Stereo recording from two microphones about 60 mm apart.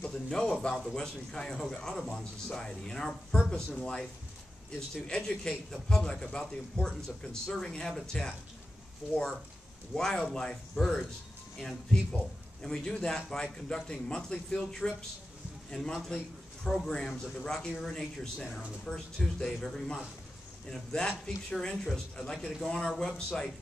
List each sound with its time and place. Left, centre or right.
0.0 s speech: centre
5.0 s speech: centre
9.0 s speech: centre
9.9 s speech: centre